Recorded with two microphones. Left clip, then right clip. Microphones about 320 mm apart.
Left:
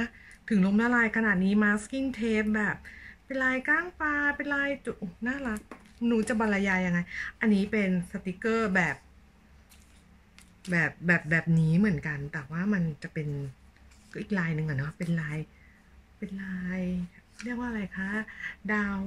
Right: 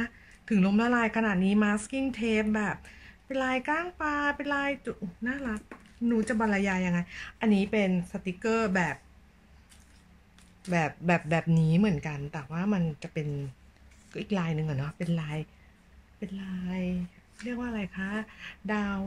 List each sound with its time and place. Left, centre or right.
0.0 s speech: centre
10.7 s speech: centre